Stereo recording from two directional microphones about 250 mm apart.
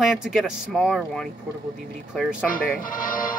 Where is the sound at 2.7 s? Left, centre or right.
Left.